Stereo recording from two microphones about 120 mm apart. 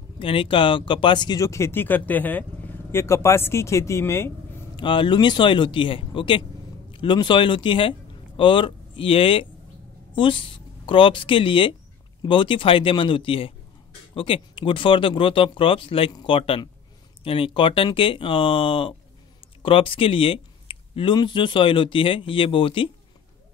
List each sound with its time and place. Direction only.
0.2 s speech: 45° left (ahead or behind)
1.4 s speech: 25° left (ahead or behind)
4.7 s speech: 40° left (ahead or behind)